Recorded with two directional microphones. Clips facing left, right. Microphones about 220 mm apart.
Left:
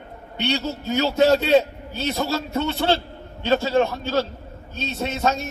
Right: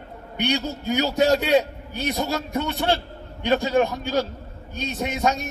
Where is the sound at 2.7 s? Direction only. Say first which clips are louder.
Left 2 dB; 30° left (ahead or behind).